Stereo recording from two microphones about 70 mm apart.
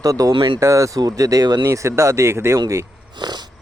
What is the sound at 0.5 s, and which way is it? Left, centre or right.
Speech, right.